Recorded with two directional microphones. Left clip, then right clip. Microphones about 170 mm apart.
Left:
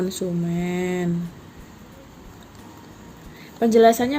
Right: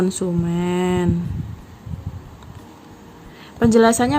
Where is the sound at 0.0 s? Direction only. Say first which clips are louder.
Right 4 dB; 50° right (ahead or behind).